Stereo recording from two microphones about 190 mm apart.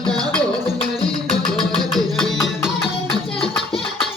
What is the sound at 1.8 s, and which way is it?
Music, centre (ahead or behind).